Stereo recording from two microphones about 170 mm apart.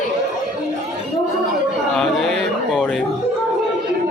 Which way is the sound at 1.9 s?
Centre (ahead or behind).